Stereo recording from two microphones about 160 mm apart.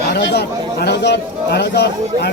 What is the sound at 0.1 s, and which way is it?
Speech, 90° left.